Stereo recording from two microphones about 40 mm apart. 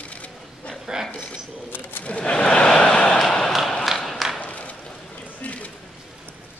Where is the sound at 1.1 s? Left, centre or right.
Left.